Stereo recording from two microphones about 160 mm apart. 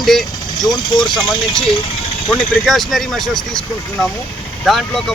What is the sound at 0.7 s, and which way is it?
Speech, 25° left (ahead or behind).